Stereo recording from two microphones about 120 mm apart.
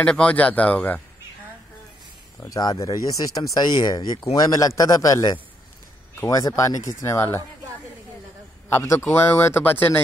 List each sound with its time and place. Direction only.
0.0 s speech: 10° left (ahead or behind)
2.4 s speech: 30° left (ahead or behind)
8.7 s speech: 20° left (ahead or behind)